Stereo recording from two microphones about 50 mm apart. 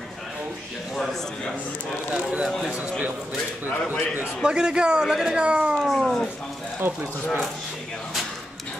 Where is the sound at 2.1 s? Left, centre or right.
Centre.